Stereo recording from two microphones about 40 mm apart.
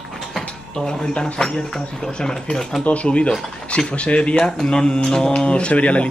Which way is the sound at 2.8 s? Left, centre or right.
Left.